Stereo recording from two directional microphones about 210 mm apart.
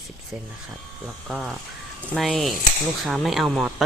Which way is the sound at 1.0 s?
Centre (ahead or behind).